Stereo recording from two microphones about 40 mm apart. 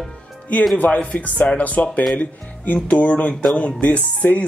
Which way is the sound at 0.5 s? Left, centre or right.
Left.